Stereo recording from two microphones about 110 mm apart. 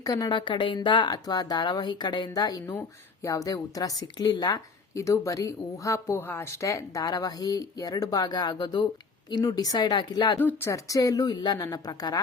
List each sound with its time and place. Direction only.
0.0 s a woman's voice: 40° left (ahead or behind)
10.3 s a woman's voice: 20° left (ahead or behind); by 12.2 s 35° left (ahead or behind)